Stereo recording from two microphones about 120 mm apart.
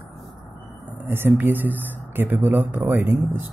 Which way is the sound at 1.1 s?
15° right (ahead or behind).